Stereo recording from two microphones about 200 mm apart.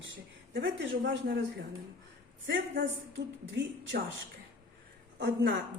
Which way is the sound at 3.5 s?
60° right (ahead or behind).